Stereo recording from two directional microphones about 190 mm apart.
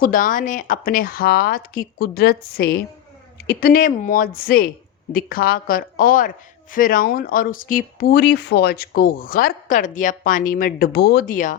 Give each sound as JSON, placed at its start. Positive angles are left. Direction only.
{"t": 0.0, "sound": "speech", "side_deg": 45}